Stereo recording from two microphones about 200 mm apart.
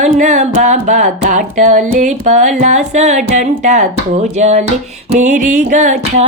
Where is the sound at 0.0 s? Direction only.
35° right (ahead or behind).